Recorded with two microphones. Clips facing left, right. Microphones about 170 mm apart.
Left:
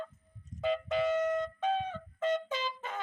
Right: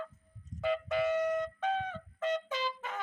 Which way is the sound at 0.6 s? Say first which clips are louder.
Left 1 dB; 20° left (ahead or behind).